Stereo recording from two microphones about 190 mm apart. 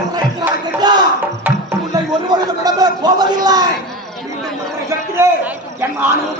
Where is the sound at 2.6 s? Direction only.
20° right (ahead or behind).